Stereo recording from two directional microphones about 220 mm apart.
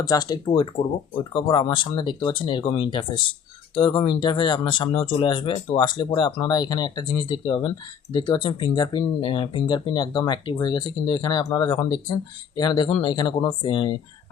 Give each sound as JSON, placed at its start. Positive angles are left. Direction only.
{"t": 0.0, "sound": "speech", "side_deg": 20}